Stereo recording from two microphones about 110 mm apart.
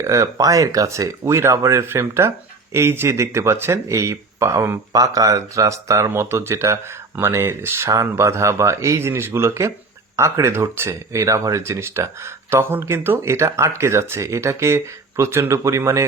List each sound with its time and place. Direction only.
0.0 s speech: 30° right (ahead or behind)